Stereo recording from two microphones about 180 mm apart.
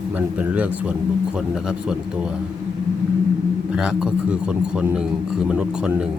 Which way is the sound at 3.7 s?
5° right (ahead or behind).